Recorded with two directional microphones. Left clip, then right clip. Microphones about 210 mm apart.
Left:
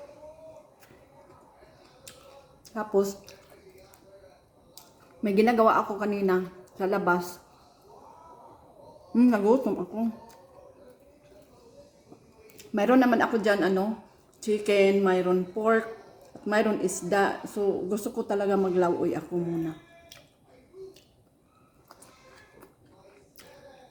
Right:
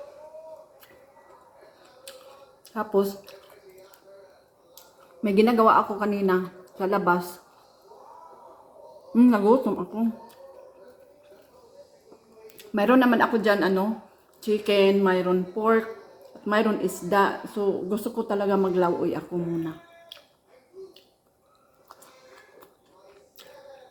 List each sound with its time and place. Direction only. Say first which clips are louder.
2.6 s speech: right 2 dB; 10° left (ahead or behind)
5.2 s speech: right 2 dB; 10° left (ahead or behind)
9.1 s speech: right 3 dB; 10° left (ahead or behind)
12.5 s speech: right 2 dB; 15° left (ahead or behind)